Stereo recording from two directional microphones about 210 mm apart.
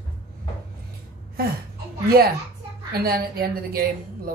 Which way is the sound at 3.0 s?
45° right (ahead or behind).